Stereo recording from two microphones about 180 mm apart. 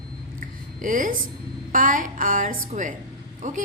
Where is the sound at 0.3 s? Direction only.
50° right (ahead or behind).